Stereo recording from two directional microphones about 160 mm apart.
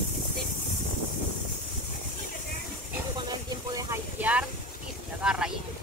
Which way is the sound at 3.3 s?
20° right (ahead or behind).